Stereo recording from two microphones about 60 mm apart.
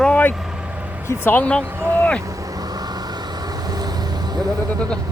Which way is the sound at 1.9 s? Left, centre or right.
Left.